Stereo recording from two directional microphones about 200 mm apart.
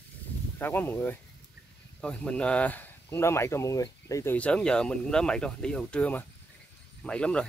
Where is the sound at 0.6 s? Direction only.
10° left (ahead or behind).